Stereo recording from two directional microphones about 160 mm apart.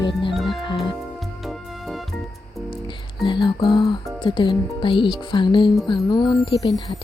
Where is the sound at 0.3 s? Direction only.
Centre (ahead or behind).